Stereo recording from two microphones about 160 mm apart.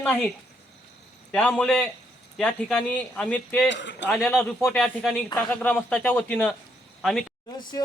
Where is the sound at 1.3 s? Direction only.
10° left (ahead or behind).